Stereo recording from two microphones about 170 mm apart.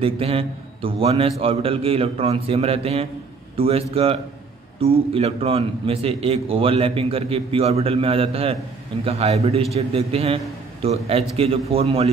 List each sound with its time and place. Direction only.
0.0 s a man's voice: 35° right (ahead or behind)